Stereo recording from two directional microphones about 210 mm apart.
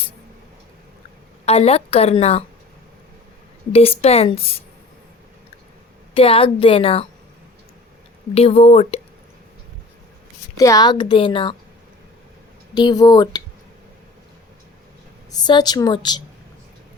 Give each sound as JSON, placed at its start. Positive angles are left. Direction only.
{"t": 1.5, "sound": "a woman's voice", "side_deg": 30}
{"t": 3.7, "sound": "a woman's voice", "side_deg": 30}
{"t": 6.1, "sound": "a woman's voice", "side_deg": 25}
{"t": 8.4, "sound": "a woman's voice", "side_deg": 30}
{"t": 10.6, "sound": "a woman's voice", "side_deg": 15}
{"t": 12.7, "sound": "a woman's voice", "side_deg": 20}
{"t": 15.3, "sound": "a woman's voice", "side_deg": 20}